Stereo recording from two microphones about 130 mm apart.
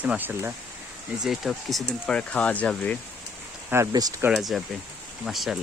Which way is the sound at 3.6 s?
20° right (ahead or behind).